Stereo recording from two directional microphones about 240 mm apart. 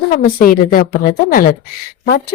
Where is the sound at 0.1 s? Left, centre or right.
Left.